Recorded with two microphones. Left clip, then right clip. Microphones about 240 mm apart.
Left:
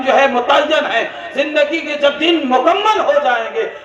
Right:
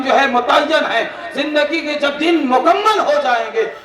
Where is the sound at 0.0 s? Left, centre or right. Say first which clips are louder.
Left 1 dB; right.